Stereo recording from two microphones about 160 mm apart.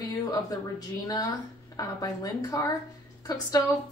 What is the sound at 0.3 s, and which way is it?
Speech, 25° left (ahead or behind).